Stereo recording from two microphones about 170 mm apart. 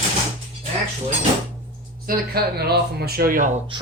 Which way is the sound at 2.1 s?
60° right (ahead or behind).